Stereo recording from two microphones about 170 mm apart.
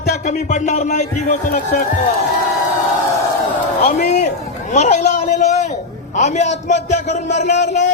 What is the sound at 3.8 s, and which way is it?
A man's voice, 45° left (ahead or behind).